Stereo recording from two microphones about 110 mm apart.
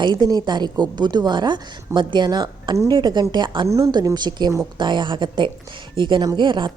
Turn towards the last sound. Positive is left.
turn(degrees=-45)  # may be behind; listen again after turning